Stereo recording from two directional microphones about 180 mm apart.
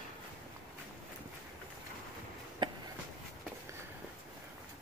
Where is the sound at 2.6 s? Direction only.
25° right (ahead or behind).